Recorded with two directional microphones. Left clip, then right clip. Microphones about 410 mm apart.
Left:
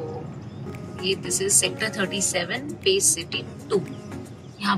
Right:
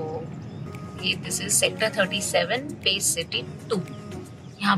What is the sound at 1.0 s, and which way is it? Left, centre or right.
Speech, centre.